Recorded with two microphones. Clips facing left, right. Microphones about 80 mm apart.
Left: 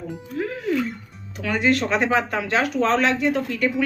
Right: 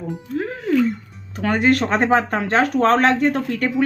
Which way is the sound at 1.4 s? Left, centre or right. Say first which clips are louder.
Right 4 dB; right.